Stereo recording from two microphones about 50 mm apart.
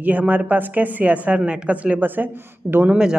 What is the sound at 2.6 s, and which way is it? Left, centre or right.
Speech, right.